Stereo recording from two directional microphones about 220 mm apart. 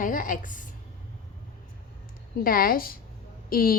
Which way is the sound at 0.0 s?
40° left (ahead or behind).